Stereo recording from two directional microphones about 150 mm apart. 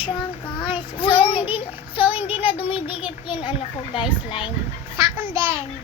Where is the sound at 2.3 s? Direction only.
35° left (ahead or behind).